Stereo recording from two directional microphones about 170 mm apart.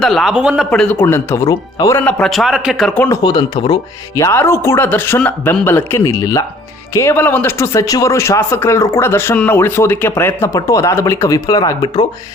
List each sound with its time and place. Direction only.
0.0 s a man's voice: centre (ahead or behind)
0.7 s a man's voice: 10° left (ahead or behind)
2.9 s a man's voice: 10° left (ahead or behind)
3.2 s a man's voice: 25° left (ahead or behind)